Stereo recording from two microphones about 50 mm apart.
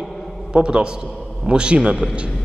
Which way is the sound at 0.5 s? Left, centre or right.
Centre.